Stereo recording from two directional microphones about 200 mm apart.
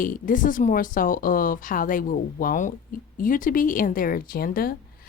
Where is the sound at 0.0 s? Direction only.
45° left (ahead or behind).